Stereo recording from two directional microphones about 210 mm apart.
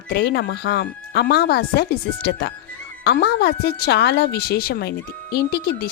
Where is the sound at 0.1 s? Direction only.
50° left (ahead or behind).